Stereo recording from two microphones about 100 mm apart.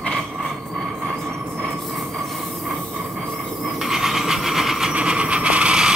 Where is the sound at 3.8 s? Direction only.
5° right (ahead or behind).